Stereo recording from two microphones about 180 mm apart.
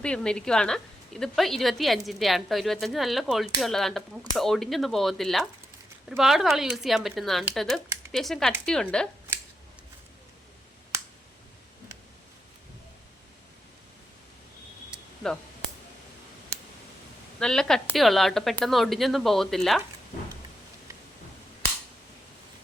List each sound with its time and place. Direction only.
0.0 s speech: 5° left (ahead or behind)
15.2 s a sound: 5° left (ahead or behind)
17.4 s speech: 5° left (ahead or behind)